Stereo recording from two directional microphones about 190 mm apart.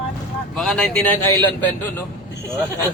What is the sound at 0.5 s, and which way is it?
A man's voice, 5° left (ahead or behind).